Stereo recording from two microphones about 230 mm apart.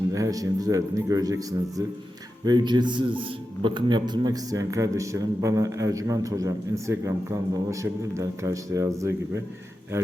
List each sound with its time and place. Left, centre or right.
0.1 s a man's voice: centre
2.4 s a man's voice: centre